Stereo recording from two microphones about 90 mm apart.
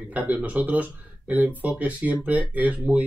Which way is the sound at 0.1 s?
15° right (ahead or behind).